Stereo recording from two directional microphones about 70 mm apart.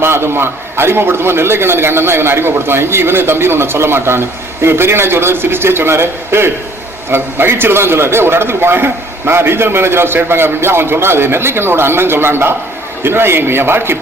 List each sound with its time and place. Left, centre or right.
0.0 s a man's voice: right